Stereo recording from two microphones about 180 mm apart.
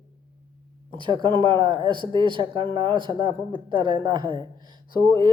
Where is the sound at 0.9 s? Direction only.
25° right (ahead or behind).